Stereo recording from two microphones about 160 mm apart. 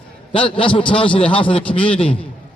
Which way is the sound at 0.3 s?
35° left (ahead or behind).